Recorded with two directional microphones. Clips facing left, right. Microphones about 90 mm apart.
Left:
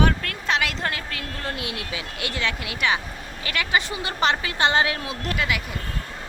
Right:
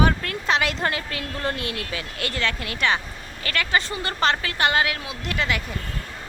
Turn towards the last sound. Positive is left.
turn(degrees=5)  # may be behind; listen again after turning